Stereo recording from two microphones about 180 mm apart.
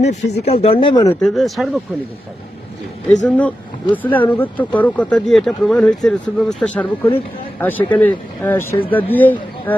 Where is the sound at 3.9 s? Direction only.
10° left (ahead or behind).